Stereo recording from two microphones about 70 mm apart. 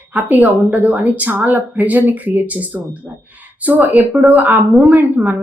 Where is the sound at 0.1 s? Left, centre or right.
Right.